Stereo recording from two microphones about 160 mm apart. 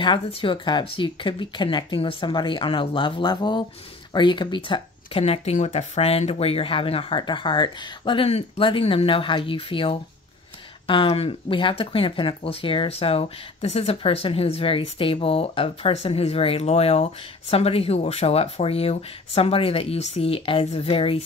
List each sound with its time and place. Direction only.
0.0 s speech: 30° left (ahead or behind)